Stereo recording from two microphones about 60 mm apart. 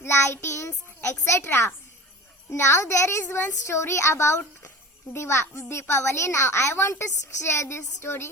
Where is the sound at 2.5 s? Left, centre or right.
Left.